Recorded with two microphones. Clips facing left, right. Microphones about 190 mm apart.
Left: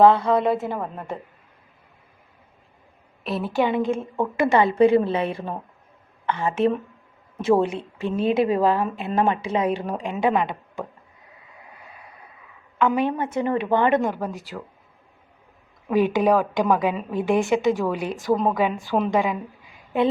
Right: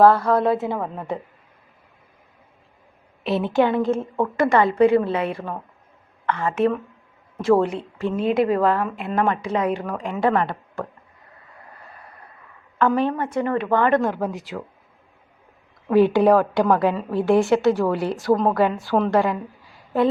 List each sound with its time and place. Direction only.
0.2 s a woman's voice: centre (ahead or behind)
3.2 s a woman's voice: centre (ahead or behind)
3.6 s a woman's voice: 10° left (ahead or behind)
11.7 s a sound: 10° left (ahead or behind)
12.8 s a woman's voice: 15° left (ahead or behind)
14.0 s a woman's voice: centre (ahead or behind)
16.0 s a woman's voice: 15° left (ahead or behind)